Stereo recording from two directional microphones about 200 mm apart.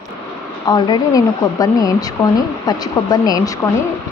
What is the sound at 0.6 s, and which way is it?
Speech, 20° left (ahead or behind).